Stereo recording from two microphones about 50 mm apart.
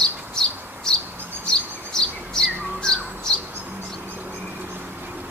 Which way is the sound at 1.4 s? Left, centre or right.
Centre.